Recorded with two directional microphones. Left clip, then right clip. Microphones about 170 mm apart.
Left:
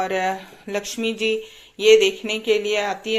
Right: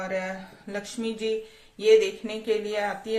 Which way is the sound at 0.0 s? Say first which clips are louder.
Left 8 dB; 30° left (ahead or behind).